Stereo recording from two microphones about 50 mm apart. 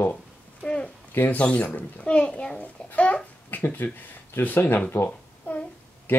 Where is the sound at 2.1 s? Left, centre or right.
Left.